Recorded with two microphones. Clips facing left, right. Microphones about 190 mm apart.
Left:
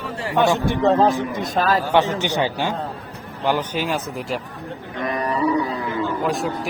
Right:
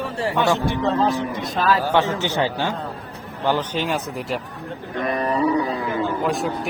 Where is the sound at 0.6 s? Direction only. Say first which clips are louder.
Left 4 dB; 50° left (ahead or behind).